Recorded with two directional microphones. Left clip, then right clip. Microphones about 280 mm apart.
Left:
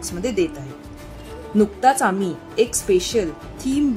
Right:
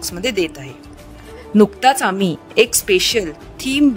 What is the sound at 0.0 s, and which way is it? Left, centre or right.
Speech, right.